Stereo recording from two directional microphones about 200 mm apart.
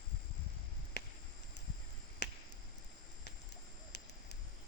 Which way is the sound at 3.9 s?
55° left (ahead or behind).